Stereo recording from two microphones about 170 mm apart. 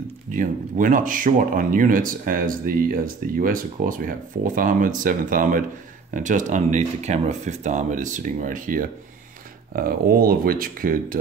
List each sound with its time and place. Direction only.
0.3 s speech: 50° right (ahead or behind)